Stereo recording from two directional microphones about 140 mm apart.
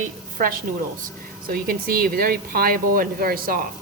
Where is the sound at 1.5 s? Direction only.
90° right.